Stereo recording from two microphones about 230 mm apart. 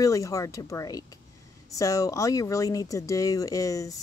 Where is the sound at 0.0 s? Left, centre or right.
Centre.